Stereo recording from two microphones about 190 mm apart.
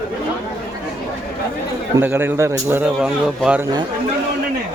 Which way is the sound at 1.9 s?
10° right (ahead or behind).